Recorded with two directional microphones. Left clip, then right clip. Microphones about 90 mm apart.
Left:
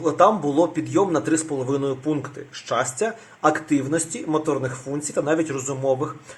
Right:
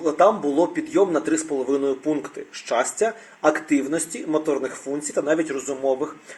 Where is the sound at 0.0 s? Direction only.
20° left (ahead or behind).